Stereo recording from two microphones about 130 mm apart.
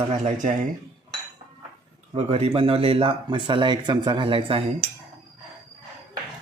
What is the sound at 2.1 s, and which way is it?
Speech, 50° right (ahead or behind).